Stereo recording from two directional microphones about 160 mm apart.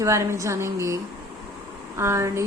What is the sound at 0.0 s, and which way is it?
Speech, 20° right (ahead or behind).